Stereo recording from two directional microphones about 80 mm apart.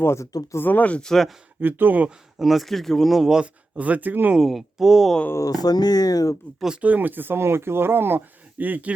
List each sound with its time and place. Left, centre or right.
0.0 s speech: left; by 1.0 s centre
1.0 s speech: centre
1.6 s speech: right
2.0 s speech: centre; by 4.4 s right
4.4 s speech: centre
5.5 s speech: left
6.8 s speech: right